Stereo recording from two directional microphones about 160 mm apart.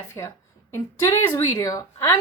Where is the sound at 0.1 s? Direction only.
15° left (ahead or behind).